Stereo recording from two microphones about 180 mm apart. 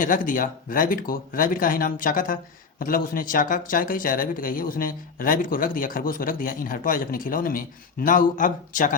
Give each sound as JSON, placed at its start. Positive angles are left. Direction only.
{"t": 0.0, "sound": "speech", "side_deg": 50}